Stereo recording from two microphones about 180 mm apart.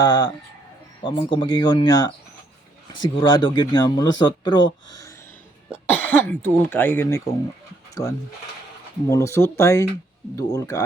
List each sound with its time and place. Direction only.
0.0 s speech: 20° left (ahead or behind)
5.8 s cough: 10° left (ahead or behind)
6.6 s speech: 10° left (ahead or behind)
9.0 s speech: 15° left (ahead or behind)